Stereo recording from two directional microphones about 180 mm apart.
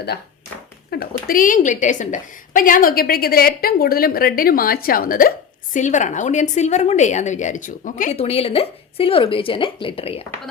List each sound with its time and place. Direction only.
0.9 s a woman's voice: 55° left (ahead or behind); by 10.2 s 35° left (ahead or behind)